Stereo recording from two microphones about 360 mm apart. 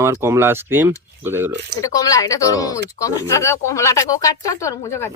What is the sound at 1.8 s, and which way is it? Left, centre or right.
Speech, centre.